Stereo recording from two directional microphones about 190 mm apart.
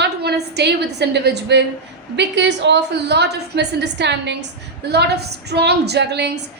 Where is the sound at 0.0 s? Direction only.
60° right (ahead or behind).